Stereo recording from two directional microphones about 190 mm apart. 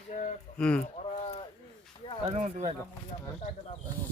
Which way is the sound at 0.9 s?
30° left (ahead or behind).